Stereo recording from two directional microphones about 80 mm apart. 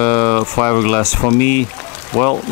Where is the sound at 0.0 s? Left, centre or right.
Centre.